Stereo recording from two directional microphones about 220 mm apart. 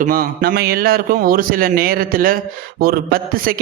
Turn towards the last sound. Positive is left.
turn(degrees=-40)  # may be behind; listen again after turning